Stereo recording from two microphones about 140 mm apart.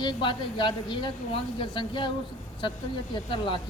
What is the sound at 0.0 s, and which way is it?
Speech, 35° left (ahead or behind).